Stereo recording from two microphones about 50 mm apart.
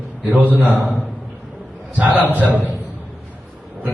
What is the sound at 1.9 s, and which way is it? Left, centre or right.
Speech, right.